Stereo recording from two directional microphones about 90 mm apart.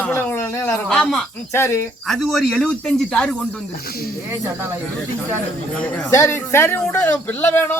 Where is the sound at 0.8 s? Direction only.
5° left (ahead or behind).